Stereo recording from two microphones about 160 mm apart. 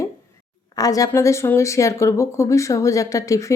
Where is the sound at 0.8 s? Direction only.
20° left (ahead or behind).